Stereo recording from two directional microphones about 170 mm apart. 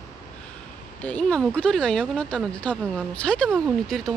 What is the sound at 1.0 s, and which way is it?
Speech, 5° left (ahead or behind).